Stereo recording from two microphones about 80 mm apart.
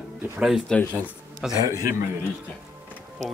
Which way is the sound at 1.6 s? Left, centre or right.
Right.